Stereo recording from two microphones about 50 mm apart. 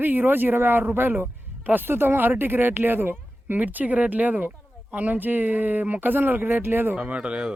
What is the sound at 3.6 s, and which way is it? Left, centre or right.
Speech, right.